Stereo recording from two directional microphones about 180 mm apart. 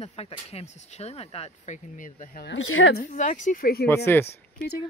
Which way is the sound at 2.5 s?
90° left.